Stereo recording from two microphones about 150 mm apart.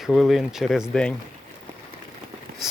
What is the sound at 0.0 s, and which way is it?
Speech, centre (ahead or behind).